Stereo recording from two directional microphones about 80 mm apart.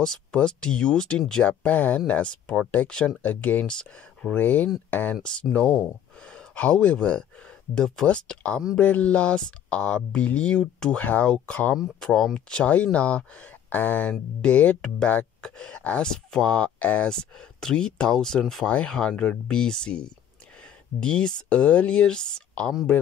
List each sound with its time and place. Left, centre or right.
0.0 s speech: centre